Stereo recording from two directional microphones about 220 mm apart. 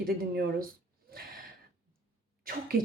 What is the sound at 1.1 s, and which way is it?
Gasp, 40° right (ahead or behind).